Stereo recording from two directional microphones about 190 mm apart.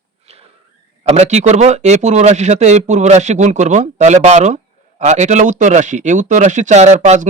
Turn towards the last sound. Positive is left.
turn(degrees=-40)  # may be behind; listen again after turning